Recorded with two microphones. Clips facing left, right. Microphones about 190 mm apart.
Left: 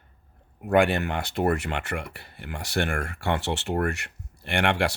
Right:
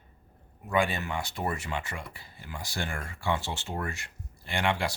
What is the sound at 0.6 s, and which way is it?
Speech, 65° left (ahead or behind).